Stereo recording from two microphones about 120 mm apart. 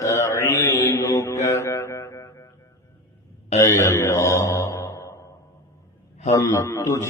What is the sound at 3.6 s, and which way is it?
Mantra, 25° left (ahead or behind).